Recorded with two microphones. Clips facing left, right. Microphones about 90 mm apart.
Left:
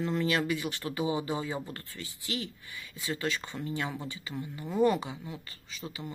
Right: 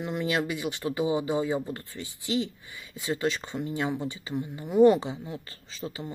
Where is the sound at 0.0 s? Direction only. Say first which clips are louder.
Right 1 dB; 15° right (ahead or behind).